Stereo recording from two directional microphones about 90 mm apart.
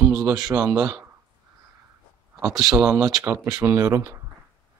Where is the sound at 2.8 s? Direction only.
20° right (ahead or behind).